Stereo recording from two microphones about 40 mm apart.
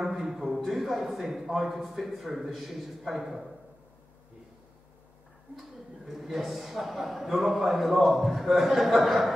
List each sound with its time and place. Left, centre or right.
0.0 s a sound: centre
2.5 s a man's voice: centre
5.6 s a man's voice: centre